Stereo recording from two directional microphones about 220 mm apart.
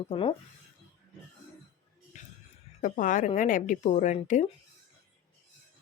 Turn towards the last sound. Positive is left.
turn(degrees=30)  # may be behind; listen again after turning